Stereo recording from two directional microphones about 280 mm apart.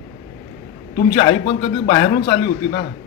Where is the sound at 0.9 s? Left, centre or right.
Left.